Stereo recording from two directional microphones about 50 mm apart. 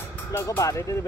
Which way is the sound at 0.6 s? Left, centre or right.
Left.